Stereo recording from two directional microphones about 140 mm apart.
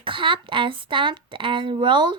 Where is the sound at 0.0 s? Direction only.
35° right (ahead or behind).